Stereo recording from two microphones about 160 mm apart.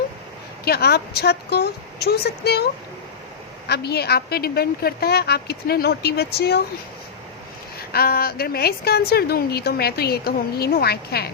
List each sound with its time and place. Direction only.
0.6 s speech: 80° left
3.7 s a woman's voice: 90° left
7.8 s a woman's voice: 75° left (ahead or behind)